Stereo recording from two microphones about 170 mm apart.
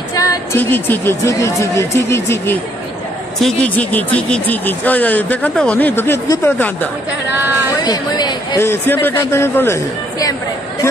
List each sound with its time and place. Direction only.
0.1 s speech: 15° left (ahead or behind)
7.8 s speech: 25° left (ahead or behind)
8.6 s speech: 10° left (ahead or behind)